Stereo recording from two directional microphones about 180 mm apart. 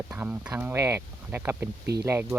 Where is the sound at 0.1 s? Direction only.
10° right (ahead or behind).